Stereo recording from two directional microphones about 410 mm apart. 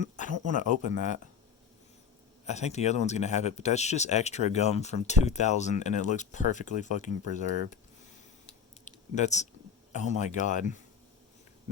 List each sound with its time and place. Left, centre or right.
0.0 s speech: centre
2.5 s speech: centre
8.8 s clicking: centre
9.9 s speech: centre